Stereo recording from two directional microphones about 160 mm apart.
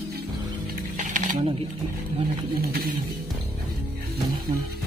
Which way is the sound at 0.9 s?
55° right (ahead or behind).